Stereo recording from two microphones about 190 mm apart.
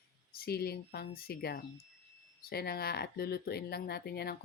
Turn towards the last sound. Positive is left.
turn(degrees=55)  # may be behind; listen again after turning